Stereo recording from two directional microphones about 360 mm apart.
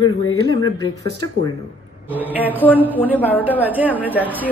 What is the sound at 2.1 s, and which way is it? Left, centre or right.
A woman's voice, centre.